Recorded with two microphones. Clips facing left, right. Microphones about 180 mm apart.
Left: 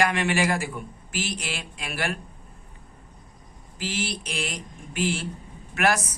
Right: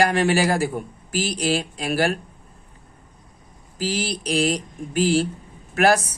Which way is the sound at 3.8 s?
35° right (ahead or behind).